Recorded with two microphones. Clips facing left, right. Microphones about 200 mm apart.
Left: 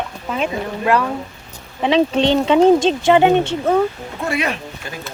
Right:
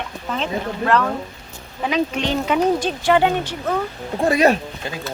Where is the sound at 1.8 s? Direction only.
30° left (ahead or behind).